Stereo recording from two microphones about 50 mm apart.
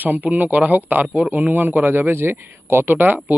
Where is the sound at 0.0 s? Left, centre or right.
Right.